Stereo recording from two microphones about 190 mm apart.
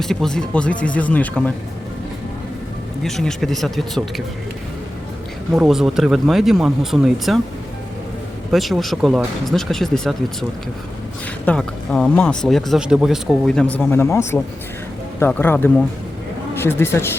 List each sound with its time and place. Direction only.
0.0 s speech: centre (ahead or behind)
3.0 s speech: centre (ahead or behind)
5.5 s speech: centre (ahead or behind)
8.5 s speech: centre (ahead or behind)
11.4 s speech: 5° left (ahead or behind)